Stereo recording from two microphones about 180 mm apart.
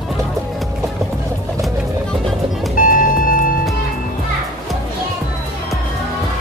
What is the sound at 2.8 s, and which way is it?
Vehicle, 50° left (ahead or behind).